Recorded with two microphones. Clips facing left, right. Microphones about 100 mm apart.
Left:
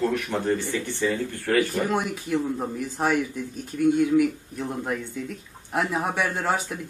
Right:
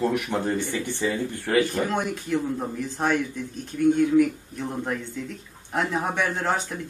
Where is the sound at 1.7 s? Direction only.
5° left (ahead or behind).